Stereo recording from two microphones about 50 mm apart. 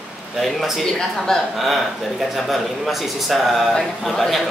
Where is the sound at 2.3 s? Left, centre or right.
Centre.